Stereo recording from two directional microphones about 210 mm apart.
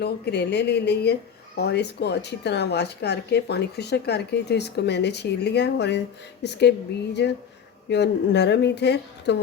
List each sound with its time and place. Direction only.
0.0 s speech: 50° left (ahead or behind)